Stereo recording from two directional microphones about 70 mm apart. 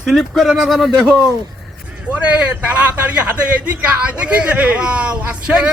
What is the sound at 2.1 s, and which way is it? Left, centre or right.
A man's voice, centre.